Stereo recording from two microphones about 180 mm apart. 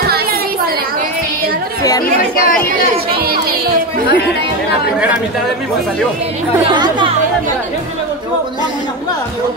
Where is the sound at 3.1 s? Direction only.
60° right (ahead or behind).